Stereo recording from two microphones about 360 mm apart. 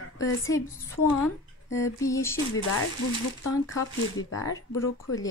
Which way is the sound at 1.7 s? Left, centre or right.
Centre.